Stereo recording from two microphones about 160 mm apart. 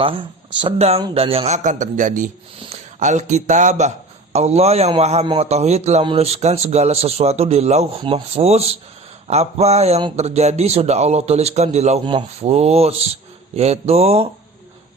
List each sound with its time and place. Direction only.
0.0 s a man's voice: 35° right (ahead or behind)
12.0 s speech: 30° right (ahead or behind)
12.5 s speech: 40° right (ahead or behind)